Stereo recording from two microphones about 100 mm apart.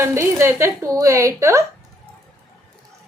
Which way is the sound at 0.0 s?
30° right (ahead or behind).